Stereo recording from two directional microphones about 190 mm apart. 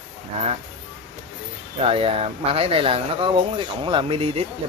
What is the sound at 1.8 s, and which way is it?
Speech, 30° right (ahead or behind).